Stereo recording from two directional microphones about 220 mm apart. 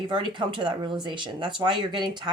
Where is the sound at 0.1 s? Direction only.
20° right (ahead or behind).